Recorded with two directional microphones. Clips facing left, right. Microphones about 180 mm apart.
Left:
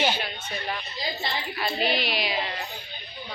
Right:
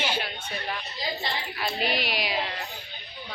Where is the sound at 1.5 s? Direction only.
10° right (ahead or behind).